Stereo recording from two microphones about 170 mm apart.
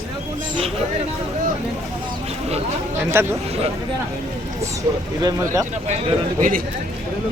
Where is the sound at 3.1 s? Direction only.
15° right (ahead or behind).